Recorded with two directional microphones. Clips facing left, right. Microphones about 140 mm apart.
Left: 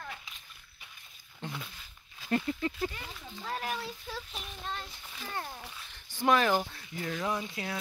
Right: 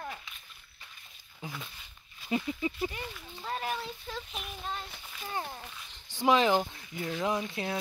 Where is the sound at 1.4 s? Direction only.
Centre (ahead or behind).